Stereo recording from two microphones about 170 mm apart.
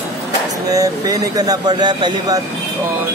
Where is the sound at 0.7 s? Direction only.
20° right (ahead or behind).